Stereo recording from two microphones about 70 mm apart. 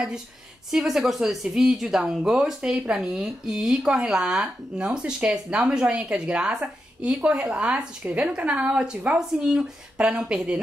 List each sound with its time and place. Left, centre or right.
0.7 s speech: centre
8.0 s speech: centre